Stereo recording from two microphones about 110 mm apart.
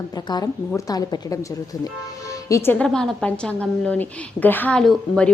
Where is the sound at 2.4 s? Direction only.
30° left (ahead or behind).